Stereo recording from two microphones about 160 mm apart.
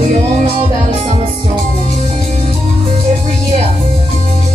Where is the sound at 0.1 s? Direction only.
45° right (ahead or behind).